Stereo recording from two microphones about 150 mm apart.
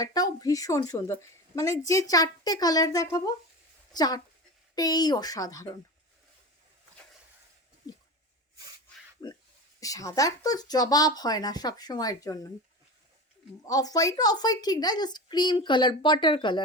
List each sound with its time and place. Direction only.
0.0 s a woman's voice: 25° left (ahead or behind)
9.8 s a woman's voice: 20° left (ahead or behind)
13.7 s a woman's voice: 25° left (ahead or behind)